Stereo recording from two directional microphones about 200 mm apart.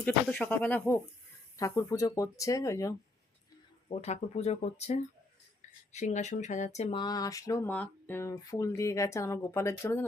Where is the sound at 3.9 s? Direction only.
30° left (ahead or behind); by 10.0 s 15° left (ahead or behind).